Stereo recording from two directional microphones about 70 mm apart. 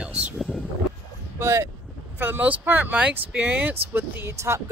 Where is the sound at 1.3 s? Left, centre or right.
Right.